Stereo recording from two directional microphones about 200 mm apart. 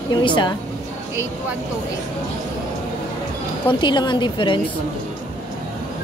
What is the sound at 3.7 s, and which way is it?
Speech, 20° left (ahead or behind).